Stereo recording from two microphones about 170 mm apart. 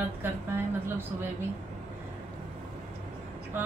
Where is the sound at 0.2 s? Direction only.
15° right (ahead or behind).